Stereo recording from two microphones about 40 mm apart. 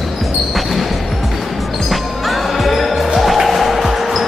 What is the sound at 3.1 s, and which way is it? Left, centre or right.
Music, centre.